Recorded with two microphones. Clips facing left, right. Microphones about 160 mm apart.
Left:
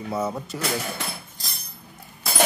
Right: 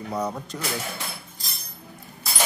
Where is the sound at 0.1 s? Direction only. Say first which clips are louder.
Left 2 dB; 5° left (ahead or behind).